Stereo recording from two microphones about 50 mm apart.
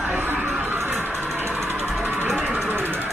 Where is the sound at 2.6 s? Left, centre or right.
Right.